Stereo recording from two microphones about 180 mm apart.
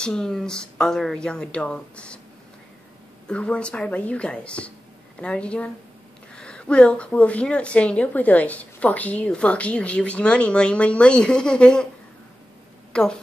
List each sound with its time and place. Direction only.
0.0 s speech: 5° left (ahead or behind)
3.3 s a woman's voice: 5° left (ahead or behind)
12.9 s speech: 5° left (ahead or behind)